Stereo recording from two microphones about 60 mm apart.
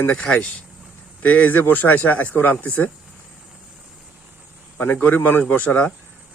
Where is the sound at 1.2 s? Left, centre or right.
Left.